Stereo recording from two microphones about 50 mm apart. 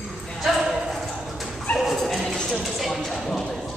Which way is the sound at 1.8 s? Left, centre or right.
Centre.